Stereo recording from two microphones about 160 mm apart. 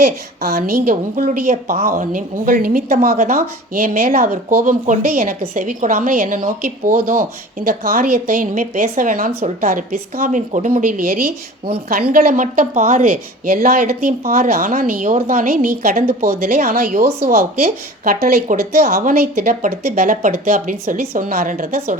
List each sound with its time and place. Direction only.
0.0 s a woman's voice: 75° right (ahead or behind); by 13.1 s 45° right (ahead or behind)
14.3 s speech: 60° right (ahead or behind)
15.8 s a woman's voice: 45° right (ahead or behind)
16.4 s speech: 60° right (ahead or behind)